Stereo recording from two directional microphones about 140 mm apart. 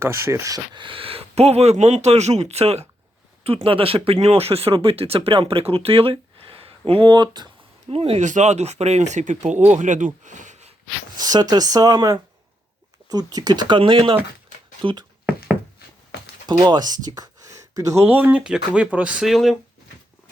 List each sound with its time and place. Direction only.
0.0 s speech: 20° right (ahead or behind)
7.9 s speech: 45° right (ahead or behind); by 10.1 s 65° right (ahead or behind)
10.2 s a sound: 60° right (ahead or behind)
11.2 s speech: 30° right (ahead or behind)
16.5 s speech: 30° right (ahead or behind); by 19.5 s centre (ahead or behind)